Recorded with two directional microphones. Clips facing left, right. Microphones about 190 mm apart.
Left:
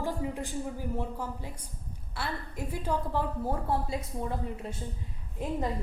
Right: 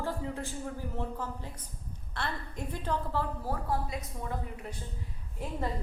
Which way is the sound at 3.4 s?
25° left (ahead or behind).